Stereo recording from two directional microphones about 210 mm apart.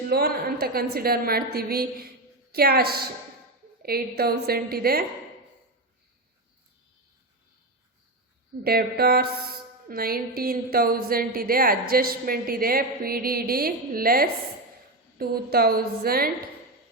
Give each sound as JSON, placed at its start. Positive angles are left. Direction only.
{"t": 0.1, "sound": "a woman's voice", "side_deg": -45}
{"t": 8.6, "sound": "a woman's voice", "side_deg": -45}